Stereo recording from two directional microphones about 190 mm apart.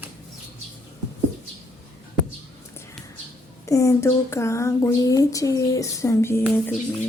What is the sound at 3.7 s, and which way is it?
Speech, 15° left (ahead or behind).